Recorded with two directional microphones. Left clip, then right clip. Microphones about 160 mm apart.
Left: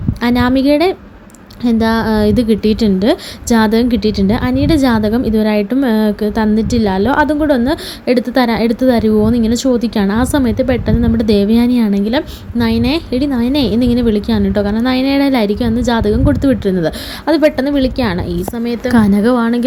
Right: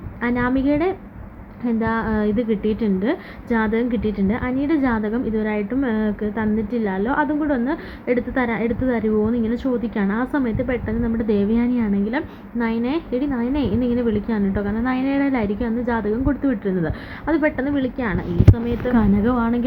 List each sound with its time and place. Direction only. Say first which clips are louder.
0.2 s a woman's voice: left 7 dB; 65° left (ahead or behind); by 2.7 s 90° left
2.8 s a woman's voice: left 9 dB; 75° left (ahead or behind)
18.9 s speech: left 8 dB; 45° left (ahead or behind)